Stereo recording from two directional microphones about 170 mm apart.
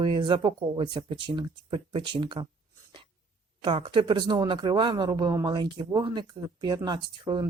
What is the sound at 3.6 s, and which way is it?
Speech, 30° right (ahead or behind).